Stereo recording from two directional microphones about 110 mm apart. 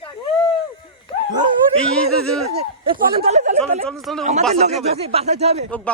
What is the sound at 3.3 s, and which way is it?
Speech, 90° right.